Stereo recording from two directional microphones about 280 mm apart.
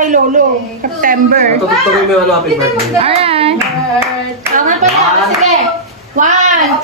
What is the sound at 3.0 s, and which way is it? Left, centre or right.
Speech, right.